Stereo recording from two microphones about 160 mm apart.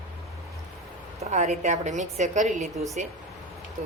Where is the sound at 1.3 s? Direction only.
45° right (ahead or behind).